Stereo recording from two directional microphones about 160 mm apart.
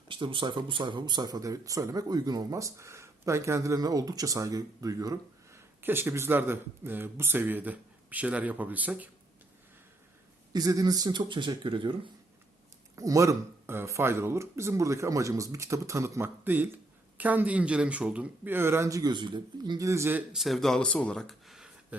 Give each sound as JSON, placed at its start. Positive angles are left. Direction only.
{"t": 0.1, "sound": "speech", "side_deg": -30}
{"t": 10.5, "sound": "speech", "side_deg": -20}
{"t": 13.0, "sound": "speech", "side_deg": -20}